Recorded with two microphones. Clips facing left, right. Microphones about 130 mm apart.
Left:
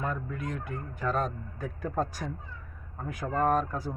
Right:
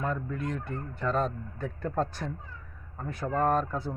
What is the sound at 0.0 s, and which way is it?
Speech, 10° left (ahead or behind).